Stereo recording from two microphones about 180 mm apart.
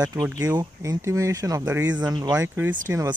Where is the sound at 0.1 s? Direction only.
20° right (ahead or behind).